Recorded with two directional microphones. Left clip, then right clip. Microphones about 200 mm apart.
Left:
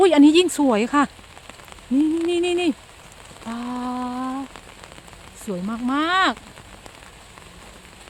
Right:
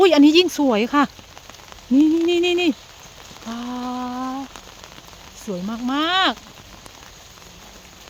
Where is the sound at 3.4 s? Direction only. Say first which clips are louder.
Even; centre (ahead or behind).